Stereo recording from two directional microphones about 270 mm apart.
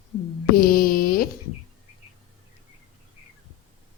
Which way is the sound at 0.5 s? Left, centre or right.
Left.